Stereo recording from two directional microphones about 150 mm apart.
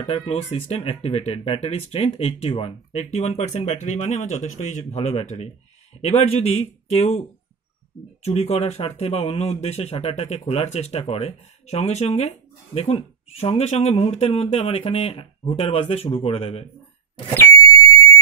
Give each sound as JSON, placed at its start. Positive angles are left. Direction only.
{"t": 0.2, "sound": "speech", "side_deg": 40}